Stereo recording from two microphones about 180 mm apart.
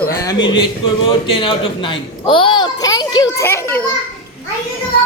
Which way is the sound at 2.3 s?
30° left (ahead or behind).